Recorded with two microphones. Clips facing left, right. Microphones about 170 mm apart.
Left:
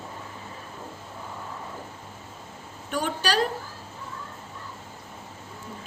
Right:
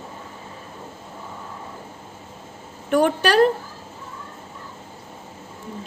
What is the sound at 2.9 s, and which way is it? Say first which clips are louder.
Speech: right 9 dB; 60° right (ahead or behind).